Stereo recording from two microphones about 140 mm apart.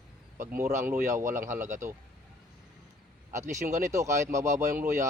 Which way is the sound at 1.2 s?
65° right (ahead or behind).